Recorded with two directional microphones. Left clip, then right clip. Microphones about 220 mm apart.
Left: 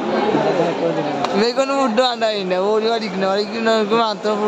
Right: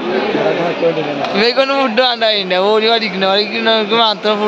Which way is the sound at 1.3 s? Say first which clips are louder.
Right 6 dB; 5° left (ahead or behind).